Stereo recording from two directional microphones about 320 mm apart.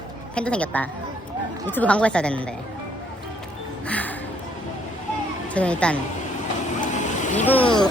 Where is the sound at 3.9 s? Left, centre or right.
Centre.